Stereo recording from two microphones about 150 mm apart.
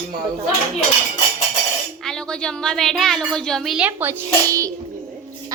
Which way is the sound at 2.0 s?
5° left (ahead or behind).